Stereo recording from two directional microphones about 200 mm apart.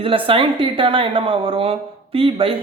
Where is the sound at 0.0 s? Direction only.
25° right (ahead or behind).